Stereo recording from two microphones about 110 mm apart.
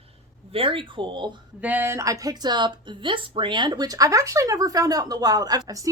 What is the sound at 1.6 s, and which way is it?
Speech, 15° right (ahead or behind).